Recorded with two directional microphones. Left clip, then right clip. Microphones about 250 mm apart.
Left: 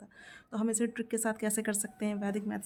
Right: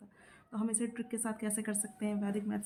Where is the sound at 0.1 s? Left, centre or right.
Left.